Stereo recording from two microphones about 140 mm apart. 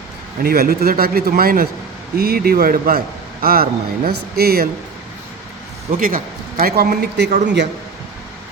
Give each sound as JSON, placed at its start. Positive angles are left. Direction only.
{"t": 0.4, "sound": "a man's voice", "side_deg": -90}
{"t": 6.0, "sound": "a man's voice", "side_deg": -90}